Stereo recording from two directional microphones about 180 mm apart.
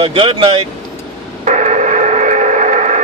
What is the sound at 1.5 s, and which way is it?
Gong, 40° right (ahead or behind).